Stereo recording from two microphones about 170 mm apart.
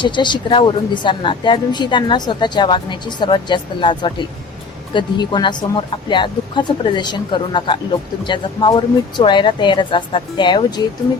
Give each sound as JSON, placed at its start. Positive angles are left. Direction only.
{"t": 0.0, "sound": "a woman's voice", "side_deg": 30}